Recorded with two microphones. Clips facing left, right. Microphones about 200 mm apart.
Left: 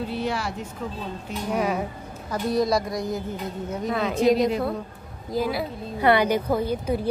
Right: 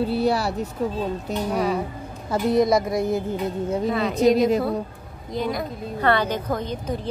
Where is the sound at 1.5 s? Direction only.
10° left (ahead or behind).